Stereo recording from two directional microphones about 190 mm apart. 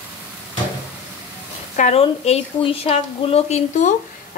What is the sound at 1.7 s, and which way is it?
A woman's voice, 40° left (ahead or behind).